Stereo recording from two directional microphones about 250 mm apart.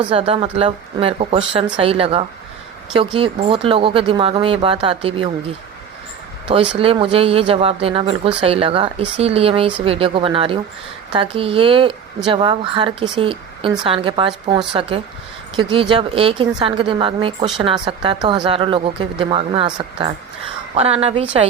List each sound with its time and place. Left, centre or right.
0.1 s speech: right
6.7 s speech: right